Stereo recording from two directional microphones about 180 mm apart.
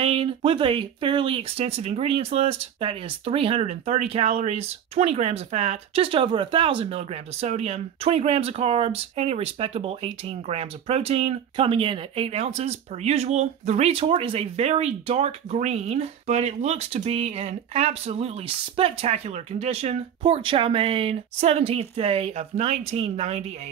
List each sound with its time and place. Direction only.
0.0 s speech: 30° right (ahead or behind)